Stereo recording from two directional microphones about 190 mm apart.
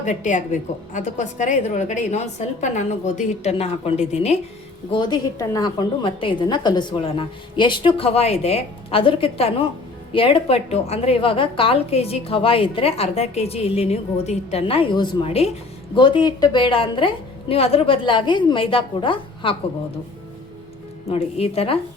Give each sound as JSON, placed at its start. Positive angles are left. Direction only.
{"t": 0.0, "sound": "a woman's voice", "side_deg": 40}
{"t": 4.9, "sound": "a woman's voice", "side_deg": 25}
{"t": 21.1, "sound": "a woman's voice", "side_deg": 30}